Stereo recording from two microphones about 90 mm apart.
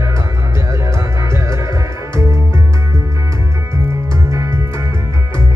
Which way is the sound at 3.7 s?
35° right (ahead or behind).